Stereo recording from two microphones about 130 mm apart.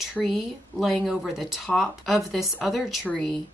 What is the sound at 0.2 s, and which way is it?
Speech, centre (ahead or behind).